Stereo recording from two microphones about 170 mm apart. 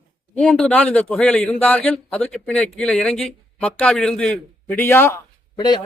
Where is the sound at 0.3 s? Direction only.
5° left (ahead or behind); by 5.8 s 25° left (ahead or behind).